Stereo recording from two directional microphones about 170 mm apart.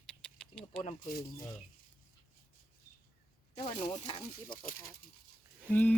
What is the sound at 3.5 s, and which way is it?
Speech, 40° left (ahead or behind).